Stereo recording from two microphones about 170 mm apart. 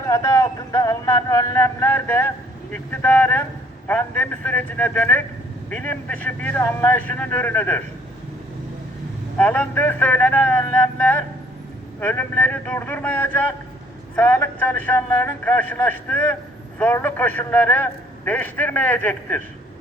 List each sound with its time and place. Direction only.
0.1 s a sound: 20° left (ahead or behind)
2.7 s a man's voice: 10° left (ahead or behind)
9.4 s a man's voice: 10° left (ahead or behind)